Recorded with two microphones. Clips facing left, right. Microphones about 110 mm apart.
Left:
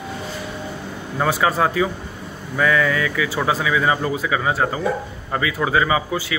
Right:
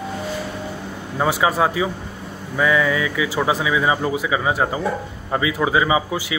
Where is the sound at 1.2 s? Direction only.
15° right (ahead or behind).